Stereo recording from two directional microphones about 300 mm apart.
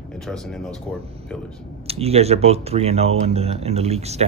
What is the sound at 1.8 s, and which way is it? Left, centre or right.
Speech, centre.